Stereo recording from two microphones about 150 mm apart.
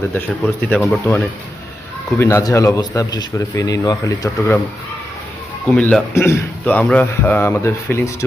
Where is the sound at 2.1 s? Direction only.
20° left (ahead or behind).